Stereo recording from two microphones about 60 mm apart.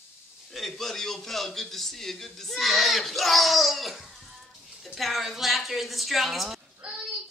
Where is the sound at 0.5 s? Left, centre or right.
Centre.